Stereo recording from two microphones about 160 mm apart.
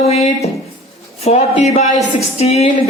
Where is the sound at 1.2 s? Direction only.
45° left (ahead or behind).